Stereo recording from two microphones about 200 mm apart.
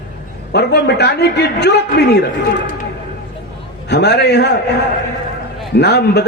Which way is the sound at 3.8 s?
55° left (ahead or behind).